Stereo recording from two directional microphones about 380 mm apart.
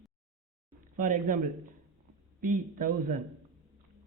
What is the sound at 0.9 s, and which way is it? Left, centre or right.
Speech, right.